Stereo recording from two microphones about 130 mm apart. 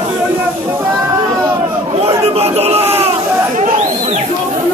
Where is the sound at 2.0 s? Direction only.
50° right (ahead or behind).